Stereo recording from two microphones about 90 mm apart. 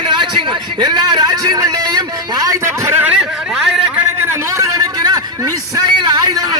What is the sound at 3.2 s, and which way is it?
Speech, 5° right (ahead or behind).